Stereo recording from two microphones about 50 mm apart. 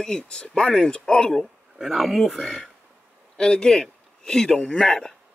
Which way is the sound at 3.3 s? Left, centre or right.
Centre.